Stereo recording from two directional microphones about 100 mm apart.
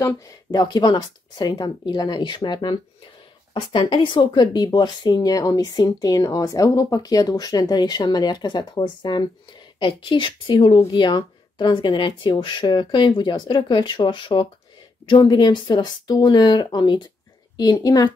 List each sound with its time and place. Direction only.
0.2 s a woman's voice: 40° left (ahead or behind)